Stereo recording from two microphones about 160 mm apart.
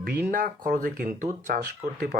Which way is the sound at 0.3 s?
60° right (ahead or behind).